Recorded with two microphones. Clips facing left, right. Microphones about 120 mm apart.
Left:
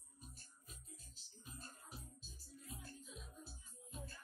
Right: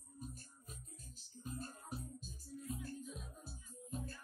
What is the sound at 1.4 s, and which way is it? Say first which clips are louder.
Music: right 10 dB; 45° right (ahead or behind).